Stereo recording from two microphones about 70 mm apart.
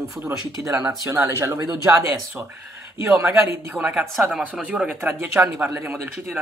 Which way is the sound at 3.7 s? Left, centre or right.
Centre.